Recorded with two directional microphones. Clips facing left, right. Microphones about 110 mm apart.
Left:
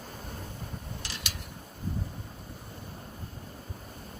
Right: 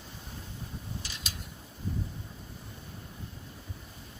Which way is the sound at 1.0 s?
75° left (ahead or behind).